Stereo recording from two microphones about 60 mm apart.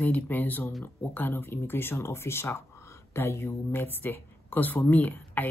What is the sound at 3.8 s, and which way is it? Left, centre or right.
Speech, left.